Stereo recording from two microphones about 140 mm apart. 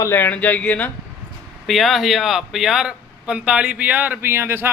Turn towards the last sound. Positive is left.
turn(degrees=-15)  # may be behind; listen again after turning